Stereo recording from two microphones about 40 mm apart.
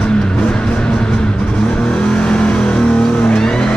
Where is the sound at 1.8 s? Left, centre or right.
Left.